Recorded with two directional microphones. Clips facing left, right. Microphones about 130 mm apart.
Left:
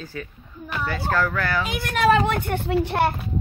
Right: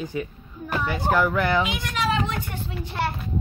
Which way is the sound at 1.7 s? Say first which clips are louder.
Left 6 dB; 55° left (ahead or behind).